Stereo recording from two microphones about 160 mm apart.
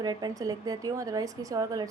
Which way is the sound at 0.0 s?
25° right (ahead or behind).